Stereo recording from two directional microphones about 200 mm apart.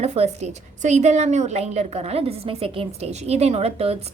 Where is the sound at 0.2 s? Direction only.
30° right (ahead or behind).